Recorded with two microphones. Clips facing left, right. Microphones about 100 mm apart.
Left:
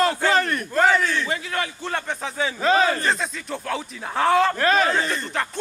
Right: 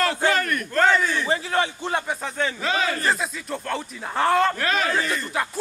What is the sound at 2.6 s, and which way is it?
Speech, 35° left (ahead or behind).